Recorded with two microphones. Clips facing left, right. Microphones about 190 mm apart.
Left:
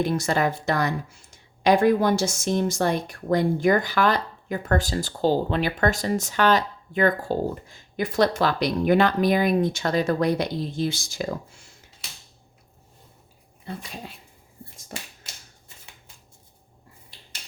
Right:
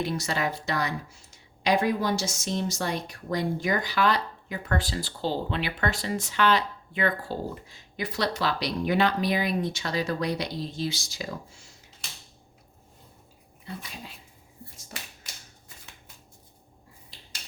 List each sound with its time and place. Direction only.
0.0 s speech: 50° left (ahead or behind)